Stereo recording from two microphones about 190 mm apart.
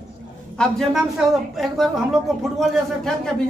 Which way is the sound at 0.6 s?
5° left (ahead or behind).